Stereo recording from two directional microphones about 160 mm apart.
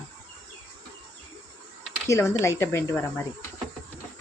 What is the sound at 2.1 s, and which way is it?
Speech, 15° left (ahead or behind).